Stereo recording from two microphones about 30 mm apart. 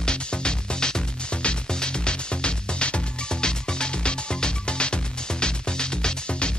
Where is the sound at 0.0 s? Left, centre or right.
Left.